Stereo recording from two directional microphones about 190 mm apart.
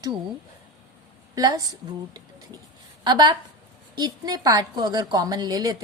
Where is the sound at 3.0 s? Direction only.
25° right (ahead or behind).